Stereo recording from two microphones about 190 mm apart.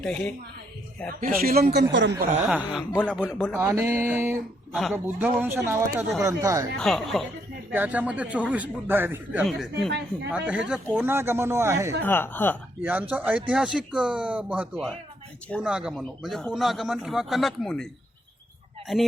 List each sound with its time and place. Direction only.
0.0 s a man's voice: 5° left (ahead or behind)
1.1 s speech: 50° right (ahead or behind); by 2.1 s 70° right (ahead or behind)
3.0 s a man's voice: 5° left (ahead or behind)
3.5 s a man's voice: 15° right (ahead or behind)
6.7 s a man's voice: centre (ahead or behind); by 11.9 s 15° right (ahead or behind)
12.0 s speech: 10° left (ahead or behind)
12.8 s a man's voice: 10° right (ahead or behind)
18.9 s a man's voice: centre (ahead or behind)